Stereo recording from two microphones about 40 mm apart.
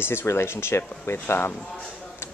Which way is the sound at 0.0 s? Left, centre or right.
Left.